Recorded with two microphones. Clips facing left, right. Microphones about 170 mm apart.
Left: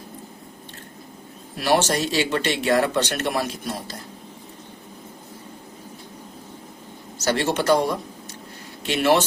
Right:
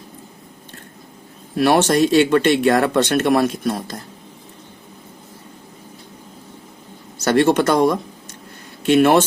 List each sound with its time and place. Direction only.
1.5 s speech: 60° right (ahead or behind)
7.3 s speech: 55° right (ahead or behind)